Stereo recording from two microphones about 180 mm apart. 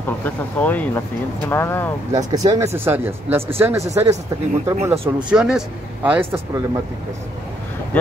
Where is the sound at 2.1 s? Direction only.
20° right (ahead or behind).